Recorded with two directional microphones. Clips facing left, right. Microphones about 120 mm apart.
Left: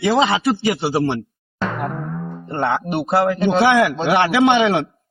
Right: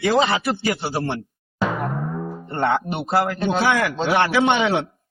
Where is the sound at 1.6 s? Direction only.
5° right (ahead or behind).